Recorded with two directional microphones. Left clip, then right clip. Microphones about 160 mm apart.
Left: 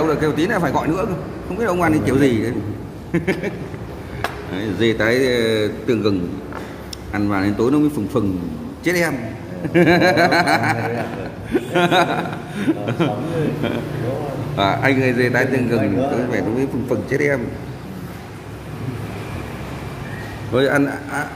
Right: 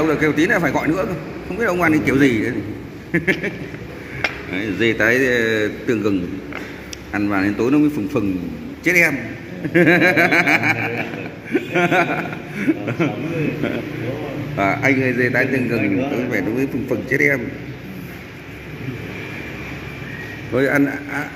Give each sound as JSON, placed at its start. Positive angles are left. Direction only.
{"t": 0.0, "sound": "a man's voice", "side_deg": 0}
{"t": 7.2, "sound": "a man's voice", "side_deg": 0}
{"t": 14.6, "sound": "a man's voice", "side_deg": 0}
{"t": 15.8, "sound": "a man's voice", "side_deg": 15}
{"t": 16.2, "sound": "a man's voice", "side_deg": 0}
{"t": 20.5, "sound": "a man's voice", "side_deg": 0}